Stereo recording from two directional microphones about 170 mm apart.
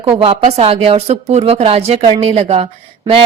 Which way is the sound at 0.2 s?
35° right (ahead or behind).